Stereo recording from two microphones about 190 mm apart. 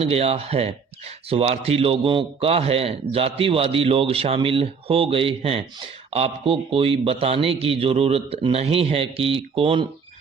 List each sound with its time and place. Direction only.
0.0 s speech: 30° right (ahead or behind)